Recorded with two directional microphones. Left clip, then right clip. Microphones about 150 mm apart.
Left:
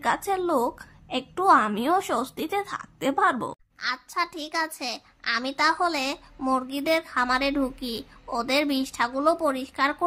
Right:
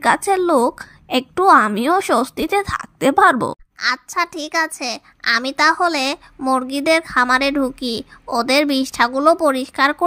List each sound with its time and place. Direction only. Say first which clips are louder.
0.0 s a woman's voice: right 9 dB; 35° right (ahead or behind)